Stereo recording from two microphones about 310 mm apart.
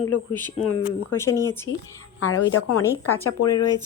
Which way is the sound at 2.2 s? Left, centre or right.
Left.